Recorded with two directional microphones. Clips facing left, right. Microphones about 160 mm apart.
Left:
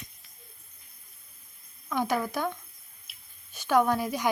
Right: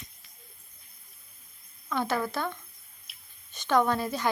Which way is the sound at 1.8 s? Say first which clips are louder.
Left 1 dB; 10° left (ahead or behind).